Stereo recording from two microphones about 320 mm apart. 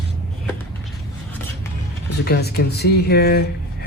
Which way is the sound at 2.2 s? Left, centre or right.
Left.